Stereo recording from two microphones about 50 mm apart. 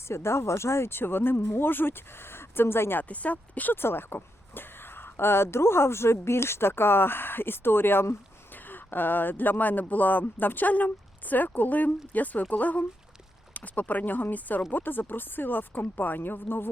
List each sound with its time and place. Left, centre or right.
0.1 s speech: left
3.0 s speech: left
3.8 s speech: left